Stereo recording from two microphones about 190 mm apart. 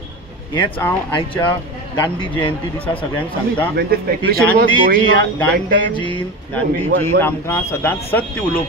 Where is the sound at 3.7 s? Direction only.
55° right (ahead or behind).